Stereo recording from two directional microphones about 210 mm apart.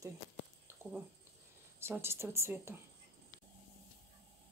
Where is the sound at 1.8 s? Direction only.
10° right (ahead or behind).